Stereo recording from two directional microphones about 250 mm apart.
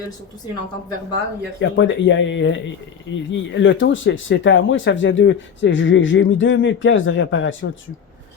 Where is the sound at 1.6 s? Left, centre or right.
Left.